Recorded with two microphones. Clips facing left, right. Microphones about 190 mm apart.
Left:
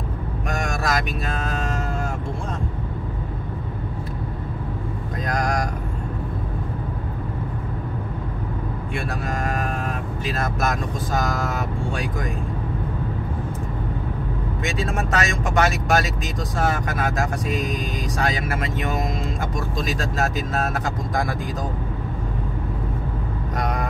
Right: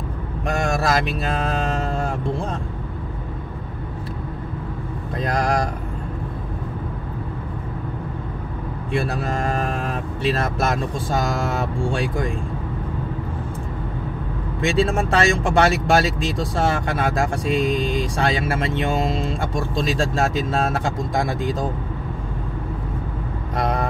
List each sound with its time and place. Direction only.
0.5 s vehicle: 30° right (ahead or behind)
5.2 s speech: 30° right (ahead or behind)
8.9 s speech: 30° right (ahead or behind)
14.6 s speech: 30° right (ahead or behind)
23.5 s vehicle: 30° right (ahead or behind)